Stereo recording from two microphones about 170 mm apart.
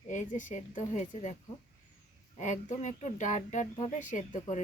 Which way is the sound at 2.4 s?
45° left (ahead or behind).